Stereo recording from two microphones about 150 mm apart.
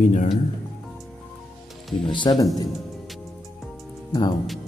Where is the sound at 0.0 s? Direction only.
55° left (ahead or behind).